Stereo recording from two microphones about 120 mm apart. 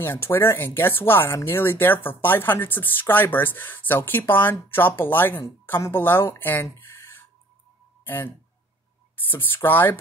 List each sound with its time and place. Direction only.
0.0 s speech: 20° left (ahead or behind)
8.0 s music: 15° left (ahead or behind)
9.3 s speech: 15° left (ahead or behind)